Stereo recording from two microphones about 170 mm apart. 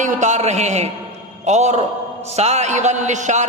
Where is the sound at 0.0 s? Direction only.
45° right (ahead or behind).